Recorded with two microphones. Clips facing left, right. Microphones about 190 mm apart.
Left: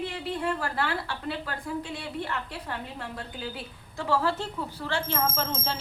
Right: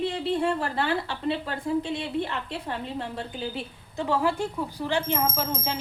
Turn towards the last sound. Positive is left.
turn(degrees=-15)  # may be behind; listen again after turning